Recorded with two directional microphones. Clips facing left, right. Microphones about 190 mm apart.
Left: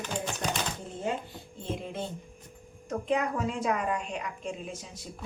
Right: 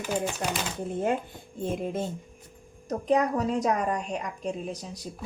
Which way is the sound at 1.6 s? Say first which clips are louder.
Right 6 dB; 50° right (ahead or behind).